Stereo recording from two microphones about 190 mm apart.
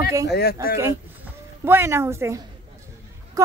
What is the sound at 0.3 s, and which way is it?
Speech, 55° left (ahead or behind).